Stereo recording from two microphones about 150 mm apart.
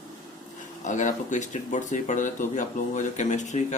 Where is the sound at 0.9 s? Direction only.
55° left (ahead or behind).